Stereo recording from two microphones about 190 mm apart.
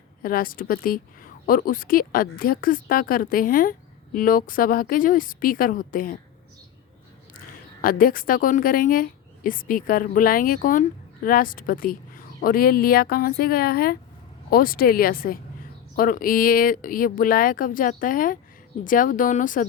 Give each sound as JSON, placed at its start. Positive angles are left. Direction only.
{"t": 0.2, "sound": "a woman's voice", "side_deg": 50}
{"t": 7.3, "sound": "a woman's voice", "side_deg": 50}